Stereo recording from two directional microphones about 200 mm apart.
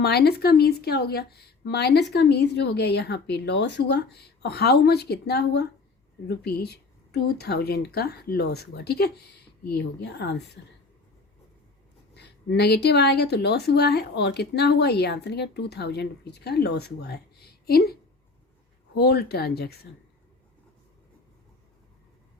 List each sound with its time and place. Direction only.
0.0 s speech: 55° left (ahead or behind)
12.1 s speech: 55° left (ahead or behind)
18.9 s speech: 55° left (ahead or behind)